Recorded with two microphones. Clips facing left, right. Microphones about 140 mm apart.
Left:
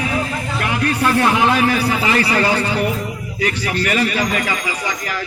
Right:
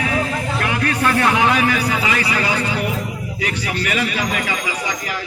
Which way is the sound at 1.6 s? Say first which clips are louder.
Left 2 dB; 30° left (ahead or behind).